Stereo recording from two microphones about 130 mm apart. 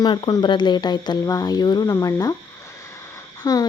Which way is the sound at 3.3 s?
25° left (ahead or behind).